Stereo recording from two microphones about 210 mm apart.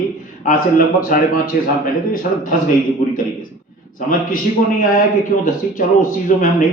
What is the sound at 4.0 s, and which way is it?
Speech, 40° left (ahead or behind).